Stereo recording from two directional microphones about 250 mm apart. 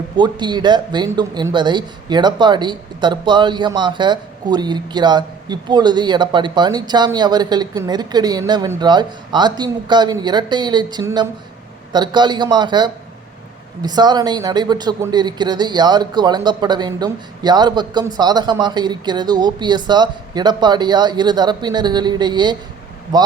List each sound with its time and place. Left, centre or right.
0.2 s speech: centre